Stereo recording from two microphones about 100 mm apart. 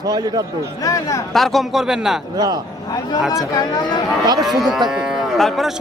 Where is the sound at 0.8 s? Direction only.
35° left (ahead or behind).